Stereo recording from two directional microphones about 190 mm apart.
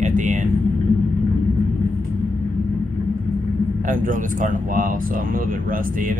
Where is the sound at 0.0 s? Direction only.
40° right (ahead or behind).